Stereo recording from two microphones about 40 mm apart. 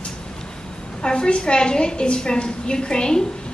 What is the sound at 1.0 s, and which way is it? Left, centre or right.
A woman's voice, left.